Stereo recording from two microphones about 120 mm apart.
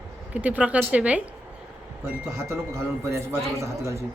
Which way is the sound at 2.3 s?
25° right (ahead or behind).